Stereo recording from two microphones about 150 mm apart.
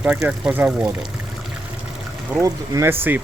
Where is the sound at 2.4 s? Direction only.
20° right (ahead or behind).